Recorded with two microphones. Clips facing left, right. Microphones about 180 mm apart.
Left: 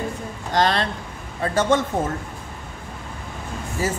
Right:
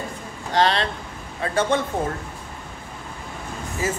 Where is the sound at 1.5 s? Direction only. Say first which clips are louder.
Left 2 dB; 40° left (ahead or behind).